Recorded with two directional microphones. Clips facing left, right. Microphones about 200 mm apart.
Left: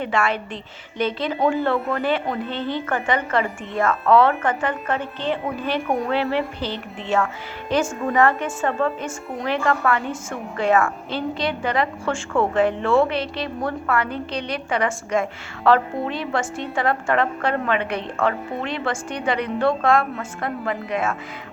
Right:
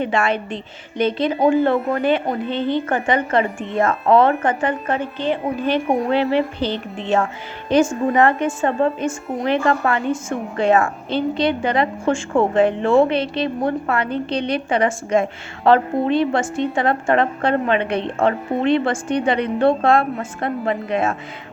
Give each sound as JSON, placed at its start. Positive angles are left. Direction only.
{"t": 0.0, "sound": "a woman's voice", "side_deg": -20}